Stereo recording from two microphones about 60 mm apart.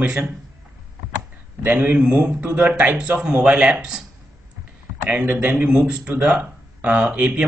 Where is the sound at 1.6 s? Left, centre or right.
Right.